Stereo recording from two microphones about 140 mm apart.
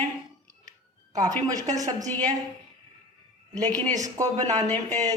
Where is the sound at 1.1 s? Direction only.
25° right (ahead or behind).